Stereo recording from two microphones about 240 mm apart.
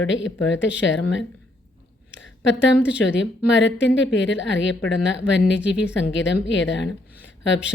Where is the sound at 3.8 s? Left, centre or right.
Left.